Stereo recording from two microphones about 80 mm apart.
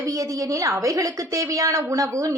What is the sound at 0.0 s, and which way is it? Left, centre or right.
A woman's voice, right.